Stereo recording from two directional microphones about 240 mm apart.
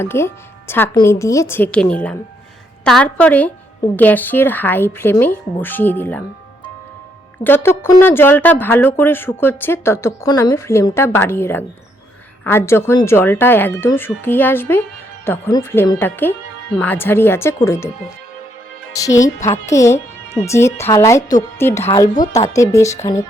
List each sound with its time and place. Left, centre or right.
0.0 s a woman's voice: centre
7.4 s speech: centre
18.9 s speech: centre
19.4 s speech: left
19.7 s speech: centre